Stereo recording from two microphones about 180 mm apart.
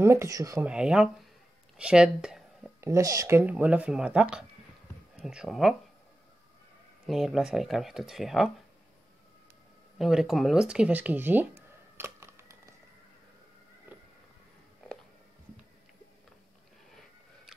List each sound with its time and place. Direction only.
0.0 s speech: 15° right (ahead or behind)
0.7 s speech: 5° right (ahead or behind)
1.8 s a sound: 5° right (ahead or behind)
2.8 s speech: 15° right (ahead or behind); by 5.8 s centre (ahead or behind)
7.1 s speech: centre (ahead or behind)
9.9 s speech: centre (ahead or behind)
13.9 s a sound: 10° right (ahead or behind)